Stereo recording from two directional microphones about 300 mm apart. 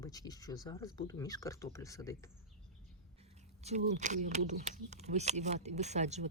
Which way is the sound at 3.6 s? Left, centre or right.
Right.